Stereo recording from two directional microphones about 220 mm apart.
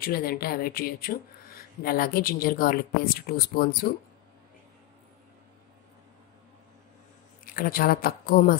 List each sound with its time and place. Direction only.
0.0 s speech: 45° left (ahead or behind)
7.4 s a woman's voice: 40° left (ahead or behind)